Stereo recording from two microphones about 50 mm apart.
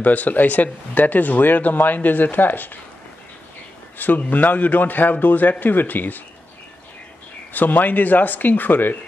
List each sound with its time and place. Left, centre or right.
0.0 s speech: left
4.3 s speech: left
7.5 s speech: left